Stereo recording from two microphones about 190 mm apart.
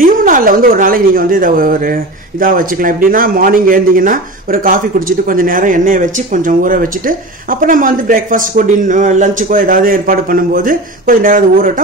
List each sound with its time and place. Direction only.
0.0 s speech: 45° right (ahead or behind)